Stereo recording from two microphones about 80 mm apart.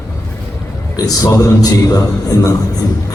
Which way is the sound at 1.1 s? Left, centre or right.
Left.